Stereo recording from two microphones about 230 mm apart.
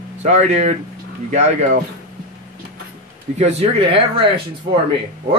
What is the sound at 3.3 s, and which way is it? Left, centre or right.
Speech, right.